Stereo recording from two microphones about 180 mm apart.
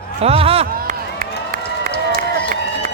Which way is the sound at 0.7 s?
55° right (ahead or behind).